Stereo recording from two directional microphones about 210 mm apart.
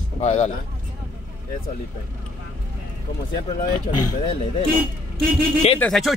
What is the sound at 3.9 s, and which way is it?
Speech, 20° left (ahead or behind).